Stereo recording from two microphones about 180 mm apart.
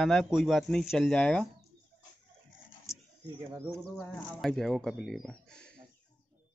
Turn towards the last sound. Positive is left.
turn(degrees=5)  # may be behind; listen again after turning